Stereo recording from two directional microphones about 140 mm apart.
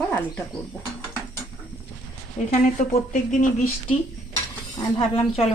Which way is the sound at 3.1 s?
65° left (ahead or behind).